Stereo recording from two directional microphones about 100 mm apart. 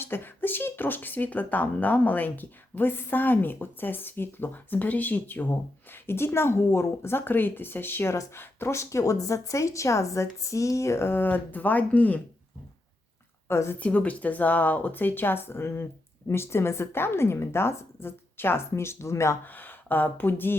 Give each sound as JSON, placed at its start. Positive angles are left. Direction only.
{"t": 0.0, "sound": "speech", "side_deg": 20}
{"t": 13.5, "sound": "speech", "side_deg": 25}
{"t": 13.8, "sound": "speech", "side_deg": 15}
{"t": 19.5, "sound": "speech", "side_deg": 20}